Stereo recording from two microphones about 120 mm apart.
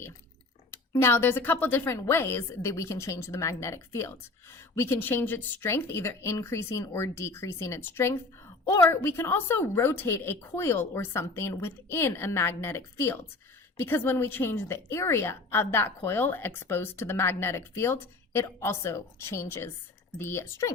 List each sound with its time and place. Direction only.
0.7 s speech: 20° left (ahead or behind)